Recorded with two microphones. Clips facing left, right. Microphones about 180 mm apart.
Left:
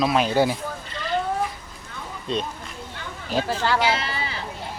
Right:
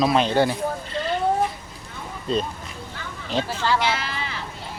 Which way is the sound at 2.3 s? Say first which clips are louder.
Right 3 dB; centre (ahead or behind).